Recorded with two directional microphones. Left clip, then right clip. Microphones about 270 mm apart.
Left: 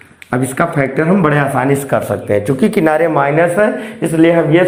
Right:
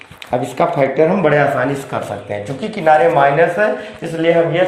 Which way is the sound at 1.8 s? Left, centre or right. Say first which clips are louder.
Left 7 dB; left.